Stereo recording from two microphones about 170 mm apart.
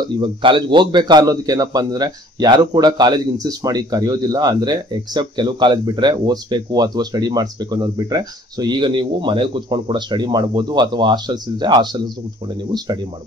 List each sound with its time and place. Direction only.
0.2 s a man's voice: 30° right (ahead or behind)